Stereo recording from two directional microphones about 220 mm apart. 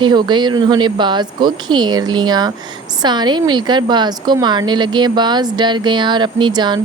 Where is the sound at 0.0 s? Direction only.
20° right (ahead or behind).